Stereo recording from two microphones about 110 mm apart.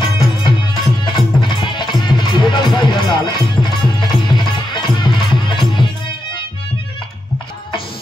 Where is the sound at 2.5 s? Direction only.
40° left (ahead or behind).